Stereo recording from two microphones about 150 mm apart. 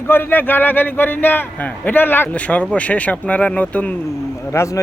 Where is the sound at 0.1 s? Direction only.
15° left (ahead or behind).